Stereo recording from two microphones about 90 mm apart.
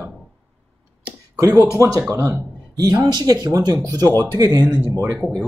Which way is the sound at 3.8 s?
35° right (ahead or behind).